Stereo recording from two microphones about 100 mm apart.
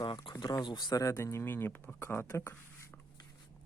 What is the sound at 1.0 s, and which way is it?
Speech, 30° left (ahead or behind).